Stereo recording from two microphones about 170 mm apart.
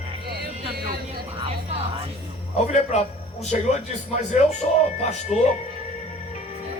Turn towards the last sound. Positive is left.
turn(degrees=40)  # may be behind; listen again after turning